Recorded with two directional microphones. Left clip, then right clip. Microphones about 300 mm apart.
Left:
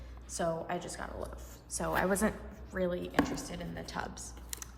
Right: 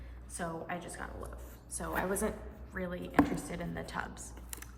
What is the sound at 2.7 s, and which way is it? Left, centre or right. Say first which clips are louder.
A woman's voice: even; centre.